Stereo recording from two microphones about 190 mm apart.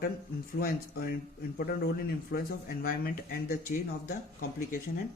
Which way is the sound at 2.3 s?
50° left (ahead or behind).